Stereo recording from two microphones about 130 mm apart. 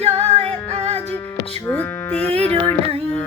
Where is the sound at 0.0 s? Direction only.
50° right (ahead or behind).